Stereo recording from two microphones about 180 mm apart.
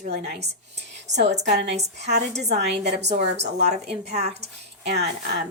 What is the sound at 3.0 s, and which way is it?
A woman's voice, 40° right (ahead or behind).